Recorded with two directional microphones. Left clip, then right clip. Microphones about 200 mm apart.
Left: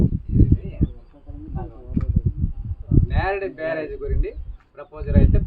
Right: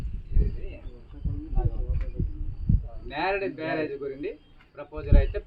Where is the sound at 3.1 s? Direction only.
Centre (ahead or behind).